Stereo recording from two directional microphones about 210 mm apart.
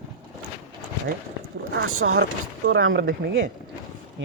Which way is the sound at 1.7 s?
75° right (ahead or behind).